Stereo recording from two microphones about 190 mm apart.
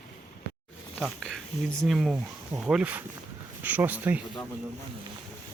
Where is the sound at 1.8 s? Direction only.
Centre (ahead or behind).